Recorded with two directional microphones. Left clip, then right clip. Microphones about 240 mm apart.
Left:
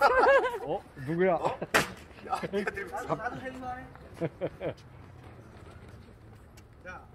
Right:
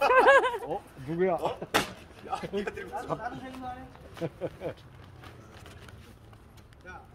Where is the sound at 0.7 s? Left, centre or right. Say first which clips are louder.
Left 1 dB; left.